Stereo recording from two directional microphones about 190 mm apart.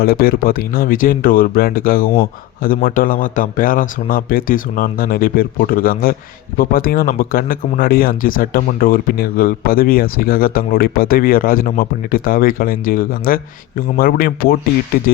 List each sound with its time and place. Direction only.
0.0 s speech: 50° left (ahead or behind)